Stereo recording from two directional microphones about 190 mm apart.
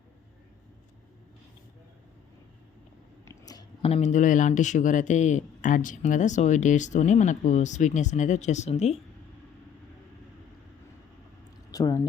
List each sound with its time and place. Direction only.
3.2 s chewing: 20° left (ahead or behind)
3.8 s speech: 35° left (ahead or behind)
11.7 s speech: 20° left (ahead or behind)